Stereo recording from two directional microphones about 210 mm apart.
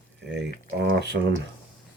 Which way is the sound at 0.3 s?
55° right (ahead or behind).